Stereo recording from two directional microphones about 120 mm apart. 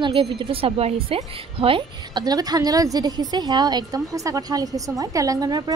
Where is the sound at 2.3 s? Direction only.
30° right (ahead or behind).